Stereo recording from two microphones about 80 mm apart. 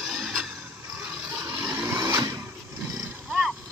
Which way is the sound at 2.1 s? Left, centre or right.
Right.